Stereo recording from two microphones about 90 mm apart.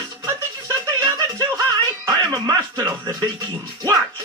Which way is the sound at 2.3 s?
45° right (ahead or behind).